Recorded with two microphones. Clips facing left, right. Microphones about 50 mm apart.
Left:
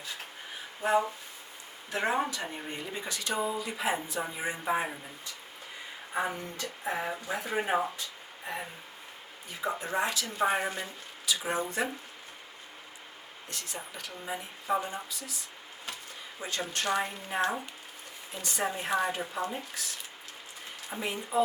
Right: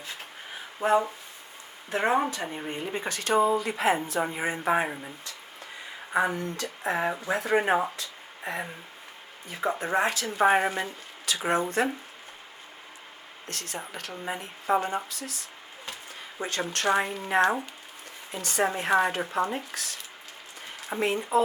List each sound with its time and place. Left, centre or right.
0.8 s speech: right
8.5 s speech: right
13.5 s speech: right
17.0 s speech: right
18.3 s speech: right
21.0 s speech: right